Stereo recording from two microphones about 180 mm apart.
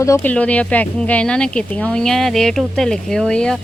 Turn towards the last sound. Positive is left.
turn(degrees=5)  # may be behind; listen again after turning